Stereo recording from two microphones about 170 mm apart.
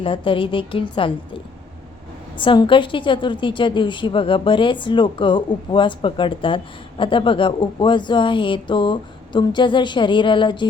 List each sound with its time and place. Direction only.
0.0 s a woman's voice: 30° left (ahead or behind)
2.4 s a woman's voice: 30° left (ahead or behind)